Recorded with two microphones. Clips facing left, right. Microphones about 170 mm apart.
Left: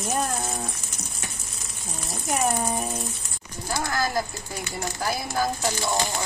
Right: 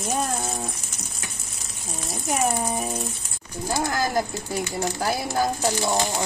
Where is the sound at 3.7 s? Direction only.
15° right (ahead or behind).